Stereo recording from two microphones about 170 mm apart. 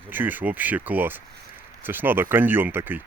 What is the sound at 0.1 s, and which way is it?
Speech, 10° right (ahead or behind).